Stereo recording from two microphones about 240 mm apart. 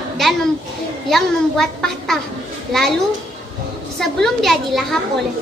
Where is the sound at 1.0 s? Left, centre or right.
Centre.